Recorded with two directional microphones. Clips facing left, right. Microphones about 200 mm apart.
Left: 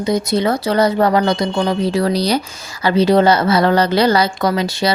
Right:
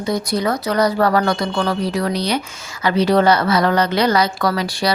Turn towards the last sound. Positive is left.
turn(degrees=25)  # may be behind; listen again after turning